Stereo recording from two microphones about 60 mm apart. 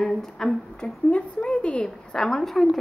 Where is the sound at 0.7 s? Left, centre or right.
Centre.